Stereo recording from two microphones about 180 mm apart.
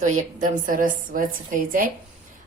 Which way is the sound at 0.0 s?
45° right (ahead or behind).